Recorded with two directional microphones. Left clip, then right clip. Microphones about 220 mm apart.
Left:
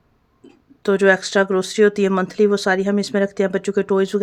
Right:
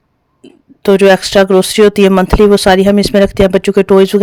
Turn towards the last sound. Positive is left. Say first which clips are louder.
# right 11 dB
turn(degrees=-35)  # may be behind; listen again after turning